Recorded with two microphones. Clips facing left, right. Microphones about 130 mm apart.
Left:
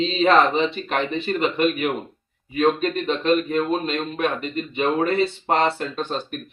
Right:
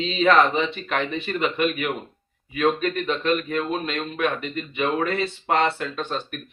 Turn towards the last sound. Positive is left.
turn(degrees=35)  # may be behind; listen again after turning